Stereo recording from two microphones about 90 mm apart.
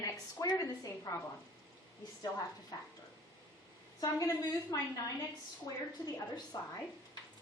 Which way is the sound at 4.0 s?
40° left (ahead or behind).